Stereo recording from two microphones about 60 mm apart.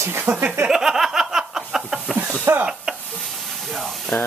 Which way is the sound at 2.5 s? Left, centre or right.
Right.